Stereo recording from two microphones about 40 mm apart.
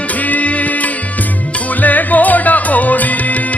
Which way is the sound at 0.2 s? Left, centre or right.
Left.